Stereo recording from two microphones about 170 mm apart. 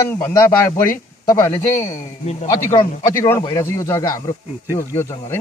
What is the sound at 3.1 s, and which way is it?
Speech, 15° left (ahead or behind).